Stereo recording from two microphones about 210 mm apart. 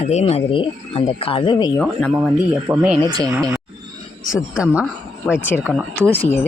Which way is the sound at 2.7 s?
5° right (ahead or behind).